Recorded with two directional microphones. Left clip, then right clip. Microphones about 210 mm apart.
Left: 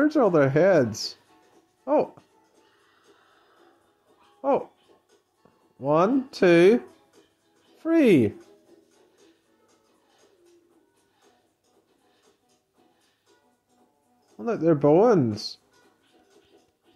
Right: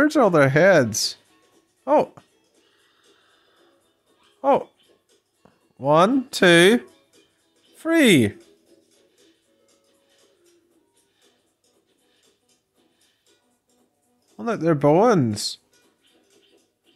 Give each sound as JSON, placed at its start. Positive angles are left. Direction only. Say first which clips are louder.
{"t": 0.0, "sound": "speech", "louder": "right 4 dB", "side_deg": -55}
{"t": 4.4, "sound": "a child's voice", "louder": "right 5 dB", "side_deg": -55}
{"t": 14.3, "sound": "speech", "louder": "right 1 dB", "side_deg": -55}